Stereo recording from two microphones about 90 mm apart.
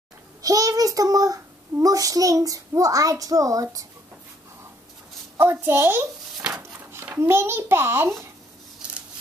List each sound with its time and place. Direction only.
0.4 s a child's voice: 40° right (ahead or behind)
5.4 s a woman's voice: 25° right (ahead or behind)